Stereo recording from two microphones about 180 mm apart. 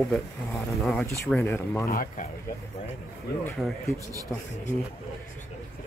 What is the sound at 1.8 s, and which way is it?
Speech, 55° left (ahead or behind).